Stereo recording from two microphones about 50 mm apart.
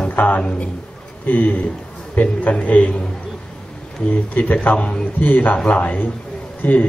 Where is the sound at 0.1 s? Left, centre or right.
Left.